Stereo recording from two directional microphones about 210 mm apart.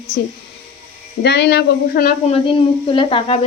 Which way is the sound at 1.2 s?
50° left (ahead or behind).